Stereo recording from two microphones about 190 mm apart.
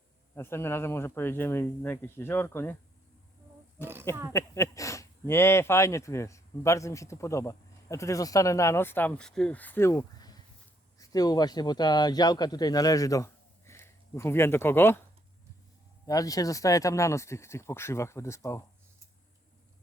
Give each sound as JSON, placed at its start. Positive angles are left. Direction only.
{"t": 0.3, "sound": "speech", "side_deg": 10}
{"t": 4.3, "sound": "speech", "side_deg": 15}
{"t": 16.0, "sound": "speech", "side_deg": 20}